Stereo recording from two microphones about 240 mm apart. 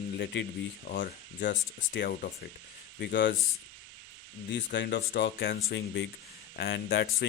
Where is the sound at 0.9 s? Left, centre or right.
Left.